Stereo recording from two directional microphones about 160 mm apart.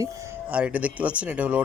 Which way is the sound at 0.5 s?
10° right (ahead or behind).